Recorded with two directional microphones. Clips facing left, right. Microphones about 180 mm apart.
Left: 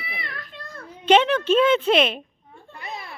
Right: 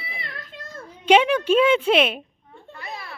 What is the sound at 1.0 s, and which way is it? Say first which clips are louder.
A woman's voice: even; 10° right (ahead or behind).